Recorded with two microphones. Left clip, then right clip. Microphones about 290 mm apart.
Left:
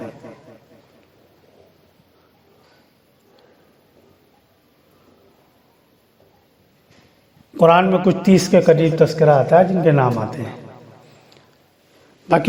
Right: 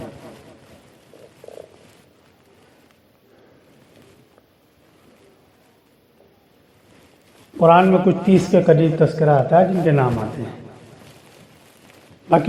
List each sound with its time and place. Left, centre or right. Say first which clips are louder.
7.5 s a man's voice: even; left
12.3 s a man's voice: even; left